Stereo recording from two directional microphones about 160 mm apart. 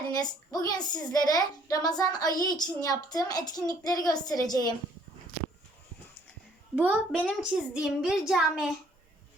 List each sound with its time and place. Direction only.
0.1 s a woman's voice: 25° left (ahead or behind)
6.7 s a child's voice: 5° right (ahead or behind)